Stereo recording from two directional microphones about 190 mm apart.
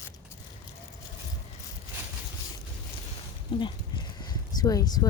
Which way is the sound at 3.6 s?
25° left (ahead or behind).